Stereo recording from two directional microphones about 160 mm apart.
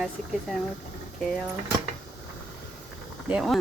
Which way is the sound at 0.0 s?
Centre (ahead or behind).